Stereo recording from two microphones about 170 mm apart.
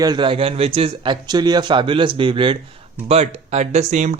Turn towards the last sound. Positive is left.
turn(degrees=-45)  # may be behind; listen again after turning